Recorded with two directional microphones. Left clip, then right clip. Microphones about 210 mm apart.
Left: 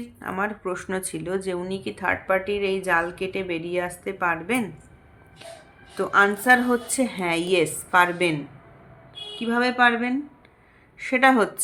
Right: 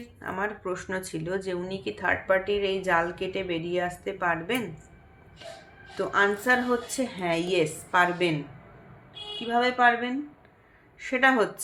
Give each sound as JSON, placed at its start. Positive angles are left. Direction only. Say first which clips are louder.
{"t": 0.0, "sound": "speech", "louder": "left 3 dB", "side_deg": 30}
{"t": 6.0, "sound": "a woman's voice", "louder": "left 5 dB", "side_deg": 30}
{"t": 9.5, "sound": "a woman's voice", "louder": "left 2 dB", "side_deg": 30}